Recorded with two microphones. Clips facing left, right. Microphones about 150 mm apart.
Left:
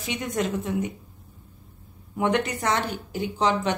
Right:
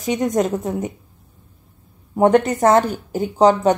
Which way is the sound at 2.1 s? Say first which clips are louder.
Right 10 dB; 45° right (ahead or behind).